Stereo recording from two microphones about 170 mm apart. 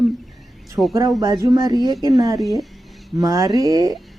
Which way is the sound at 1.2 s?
20° right (ahead or behind).